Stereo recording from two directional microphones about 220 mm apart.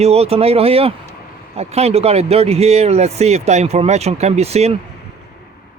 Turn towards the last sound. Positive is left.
turn(degrees=-30)  # may be behind; listen again after turning